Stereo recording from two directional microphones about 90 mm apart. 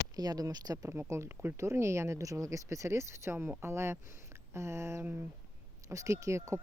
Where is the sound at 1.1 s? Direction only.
30° right (ahead or behind).